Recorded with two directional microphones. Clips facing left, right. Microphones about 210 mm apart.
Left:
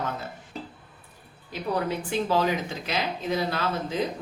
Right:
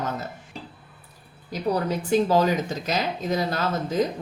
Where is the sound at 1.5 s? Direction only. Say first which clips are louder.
Right 3 dB; 40° right (ahead or behind).